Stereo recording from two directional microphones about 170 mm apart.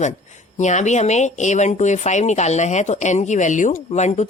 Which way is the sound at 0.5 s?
45° left (ahead or behind).